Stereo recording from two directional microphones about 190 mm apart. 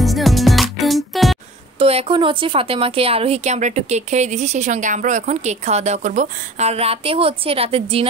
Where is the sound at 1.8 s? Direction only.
30° right (ahead or behind).